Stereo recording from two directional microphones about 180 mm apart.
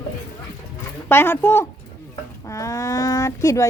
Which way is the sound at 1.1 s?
10° left (ahead or behind).